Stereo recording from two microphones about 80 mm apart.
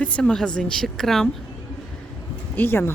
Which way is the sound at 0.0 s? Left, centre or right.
Centre.